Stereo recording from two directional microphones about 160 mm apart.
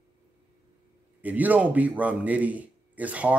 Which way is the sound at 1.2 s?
10° right (ahead or behind).